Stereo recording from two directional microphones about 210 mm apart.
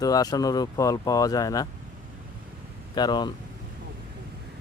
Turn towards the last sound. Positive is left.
turn(degrees=20)  # may be behind; listen again after turning